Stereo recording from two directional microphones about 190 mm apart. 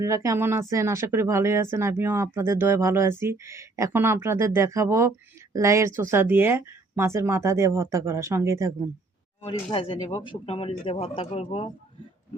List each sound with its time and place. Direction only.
0.0 s speech: 15° right (ahead or behind)
9.7 s speech: 25° left (ahead or behind)